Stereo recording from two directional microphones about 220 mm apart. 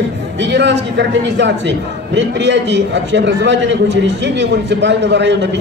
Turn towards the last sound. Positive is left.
turn(degrees=-50)  # may be behind; listen again after turning